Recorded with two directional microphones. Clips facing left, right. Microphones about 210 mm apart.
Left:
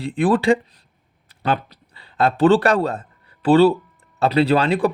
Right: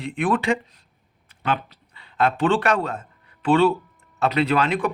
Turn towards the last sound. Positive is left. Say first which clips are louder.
# left 4 dB
turn(degrees=30)  # may be behind; listen again after turning